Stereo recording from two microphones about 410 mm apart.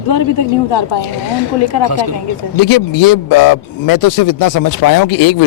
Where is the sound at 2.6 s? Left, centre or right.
Left.